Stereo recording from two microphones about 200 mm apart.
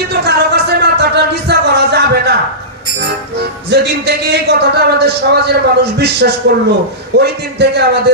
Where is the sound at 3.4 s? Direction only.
55° right (ahead or behind).